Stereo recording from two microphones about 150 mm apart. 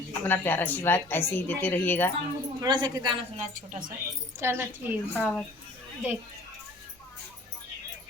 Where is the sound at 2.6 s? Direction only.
25° right (ahead or behind).